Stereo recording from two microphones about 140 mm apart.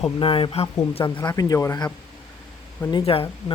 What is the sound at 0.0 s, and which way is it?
Speech, 40° left (ahead or behind).